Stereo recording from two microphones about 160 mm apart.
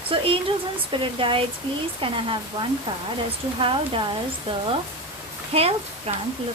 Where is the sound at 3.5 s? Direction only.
30° right (ahead or behind).